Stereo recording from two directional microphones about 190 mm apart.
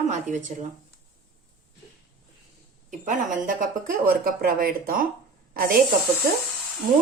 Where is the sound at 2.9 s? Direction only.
40° right (ahead or behind).